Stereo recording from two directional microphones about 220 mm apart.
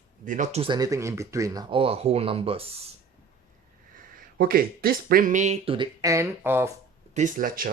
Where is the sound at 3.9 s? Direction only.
40° right (ahead or behind); by 6.7 s 10° right (ahead or behind).